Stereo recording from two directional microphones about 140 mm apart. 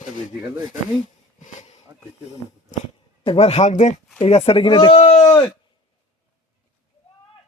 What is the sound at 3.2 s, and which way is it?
Speech, 50° left (ahead or behind).